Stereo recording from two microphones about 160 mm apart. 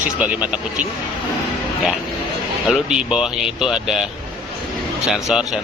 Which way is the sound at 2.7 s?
5° right (ahead or behind).